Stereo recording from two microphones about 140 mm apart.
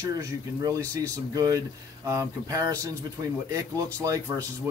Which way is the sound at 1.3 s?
25° right (ahead or behind).